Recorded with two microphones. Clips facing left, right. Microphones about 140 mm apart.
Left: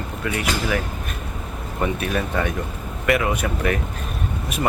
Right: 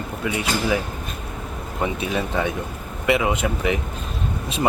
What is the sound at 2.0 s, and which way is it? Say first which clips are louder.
Speech: even; 20° right (ahead or behind).